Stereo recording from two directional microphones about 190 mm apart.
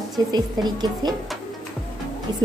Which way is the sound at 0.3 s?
20° right (ahead or behind).